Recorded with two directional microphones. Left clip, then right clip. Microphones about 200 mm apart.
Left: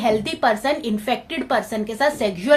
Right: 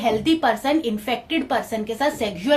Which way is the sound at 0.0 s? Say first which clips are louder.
Even; 35° left (ahead or behind).